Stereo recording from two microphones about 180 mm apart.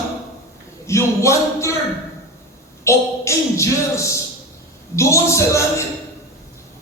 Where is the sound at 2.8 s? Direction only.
15° left (ahead or behind).